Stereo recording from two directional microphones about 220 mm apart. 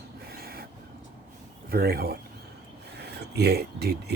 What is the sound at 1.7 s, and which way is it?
Speech, 45° right (ahead or behind).